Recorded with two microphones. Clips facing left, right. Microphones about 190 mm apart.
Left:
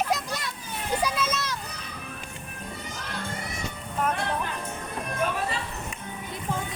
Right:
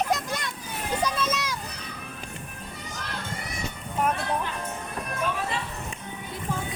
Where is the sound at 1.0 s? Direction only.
5° left (ahead or behind).